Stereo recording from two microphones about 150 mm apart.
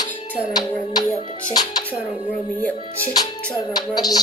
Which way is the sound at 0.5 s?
25° left (ahead or behind).